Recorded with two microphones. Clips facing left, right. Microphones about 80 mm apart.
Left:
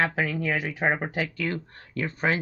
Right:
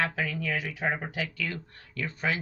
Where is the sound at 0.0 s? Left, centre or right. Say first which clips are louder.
Left 4 dB; left.